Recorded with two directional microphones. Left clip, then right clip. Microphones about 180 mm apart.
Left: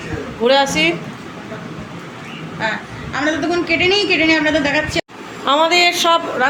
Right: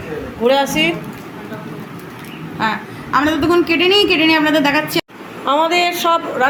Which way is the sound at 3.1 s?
55° right (ahead or behind).